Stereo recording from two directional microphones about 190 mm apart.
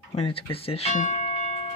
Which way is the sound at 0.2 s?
30° left (ahead or behind).